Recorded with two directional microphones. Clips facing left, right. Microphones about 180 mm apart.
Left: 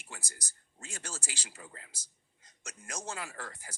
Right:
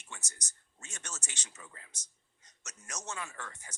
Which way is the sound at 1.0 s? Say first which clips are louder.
Left 2 dB; 30° left (ahead or behind).